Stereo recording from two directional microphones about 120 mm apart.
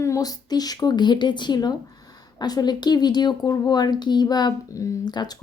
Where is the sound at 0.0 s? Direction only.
30° left (ahead or behind).